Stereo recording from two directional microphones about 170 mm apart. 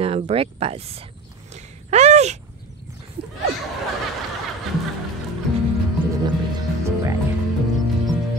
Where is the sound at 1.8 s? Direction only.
40° right (ahead or behind).